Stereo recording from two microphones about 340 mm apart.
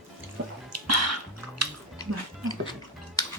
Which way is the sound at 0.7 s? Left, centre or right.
Right.